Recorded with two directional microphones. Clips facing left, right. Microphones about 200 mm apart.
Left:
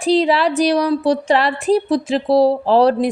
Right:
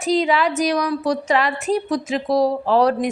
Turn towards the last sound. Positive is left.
turn(degrees=30)  # may be behind; listen again after turning